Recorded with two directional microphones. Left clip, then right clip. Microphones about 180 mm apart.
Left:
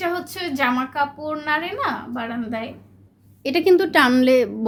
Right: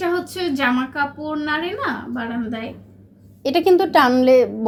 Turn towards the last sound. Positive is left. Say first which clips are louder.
# right 3 dB
turn(degrees=20)  # may be behind; listen again after turning